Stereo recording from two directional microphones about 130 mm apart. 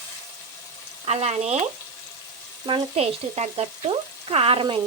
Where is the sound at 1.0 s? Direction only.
55° right (ahead or behind).